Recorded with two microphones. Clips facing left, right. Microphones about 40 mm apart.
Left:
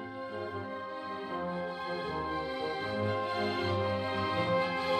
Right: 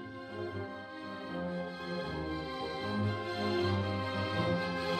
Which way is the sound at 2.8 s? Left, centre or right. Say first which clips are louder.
Left 3 dB; centre.